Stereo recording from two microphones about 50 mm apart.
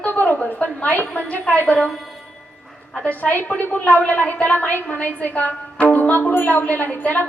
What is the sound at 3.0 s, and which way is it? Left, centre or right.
A woman's voice, left.